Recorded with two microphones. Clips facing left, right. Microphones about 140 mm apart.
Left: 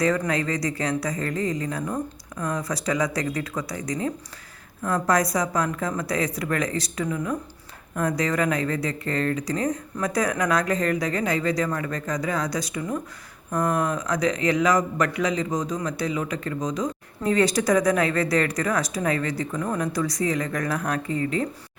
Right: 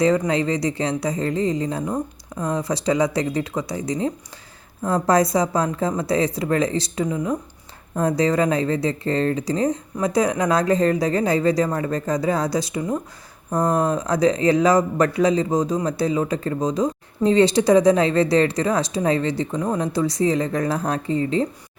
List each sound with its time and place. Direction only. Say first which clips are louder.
0.0 s speech: right 4 dB; 25° right (ahead or behind)